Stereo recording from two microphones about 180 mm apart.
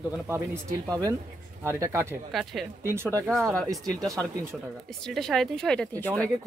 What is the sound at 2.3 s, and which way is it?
Speech, centre (ahead or behind).